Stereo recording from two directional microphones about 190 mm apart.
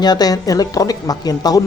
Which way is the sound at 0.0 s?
20° left (ahead or behind).